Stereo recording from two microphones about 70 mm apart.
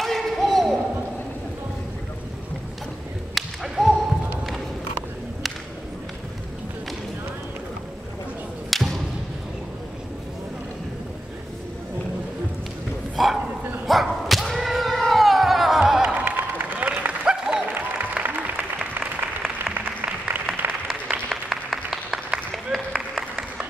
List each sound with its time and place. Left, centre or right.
0.0 s a sound: centre
3.3 s whip: centre
8.6 s a sound: centre
13.1 s bow-wow: centre
13.8 s thunk: centre
16.1 s applause: right
17.6 s applause: right
21.3 s applause: centre